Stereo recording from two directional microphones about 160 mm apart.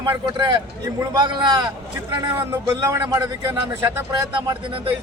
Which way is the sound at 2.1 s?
15° right (ahead or behind).